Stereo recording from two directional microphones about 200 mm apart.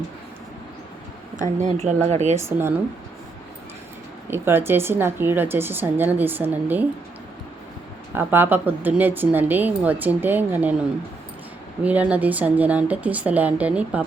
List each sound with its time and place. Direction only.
1.4 s speech: 35° right (ahead or behind)
2.4 s speech: 10° right (ahead or behind)
4.3 s speech: 10° right (ahead or behind)
8.1 s speech: 10° right (ahead or behind)
11.8 s speech: 5° right (ahead or behind)